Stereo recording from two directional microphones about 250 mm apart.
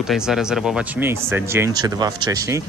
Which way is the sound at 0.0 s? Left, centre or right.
Centre.